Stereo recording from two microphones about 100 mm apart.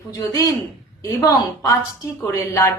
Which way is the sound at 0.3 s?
30° left (ahead or behind).